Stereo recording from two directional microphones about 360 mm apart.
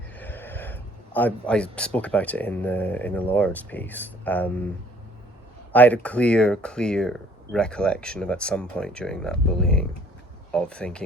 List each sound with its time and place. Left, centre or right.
0.2 s speech: centre
5.7 s speech: centre